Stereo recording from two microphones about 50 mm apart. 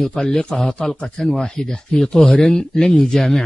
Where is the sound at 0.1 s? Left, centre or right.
Centre.